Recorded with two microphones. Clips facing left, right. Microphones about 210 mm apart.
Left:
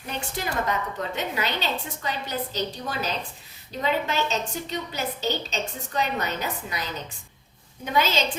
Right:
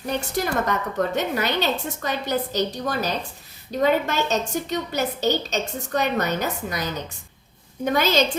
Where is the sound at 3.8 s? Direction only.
45° right (ahead or behind).